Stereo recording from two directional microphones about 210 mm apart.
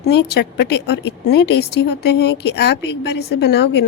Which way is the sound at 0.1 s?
50° left (ahead or behind).